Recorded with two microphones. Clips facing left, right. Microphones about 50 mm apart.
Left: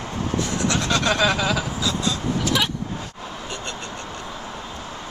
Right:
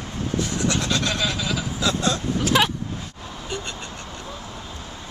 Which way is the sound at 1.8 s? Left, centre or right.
Right.